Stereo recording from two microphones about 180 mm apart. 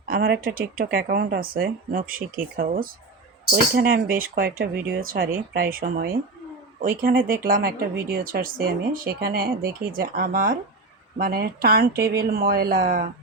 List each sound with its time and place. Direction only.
0.0 s speech: 55° right (ahead or behind)